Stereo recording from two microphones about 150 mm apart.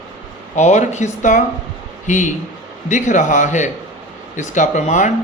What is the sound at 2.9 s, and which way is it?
Speech, 55° left (ahead or behind).